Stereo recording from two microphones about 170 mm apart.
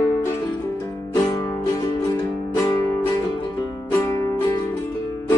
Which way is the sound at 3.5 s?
20° left (ahead or behind).